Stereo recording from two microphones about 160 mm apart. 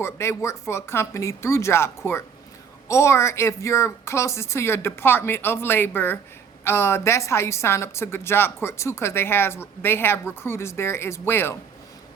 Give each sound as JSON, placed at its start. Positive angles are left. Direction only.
{"t": 0.0, "sound": "a woman's voice", "side_deg": 15}